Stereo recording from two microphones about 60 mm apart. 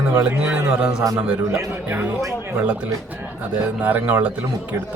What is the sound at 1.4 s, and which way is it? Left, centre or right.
Speech, right.